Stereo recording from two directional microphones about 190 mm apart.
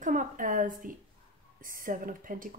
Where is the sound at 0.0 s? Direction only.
40° right (ahead or behind).